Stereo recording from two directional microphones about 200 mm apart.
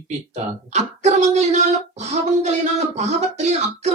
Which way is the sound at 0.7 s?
35° right (ahead or behind).